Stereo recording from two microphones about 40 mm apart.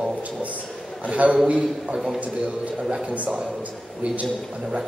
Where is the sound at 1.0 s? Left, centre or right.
Right.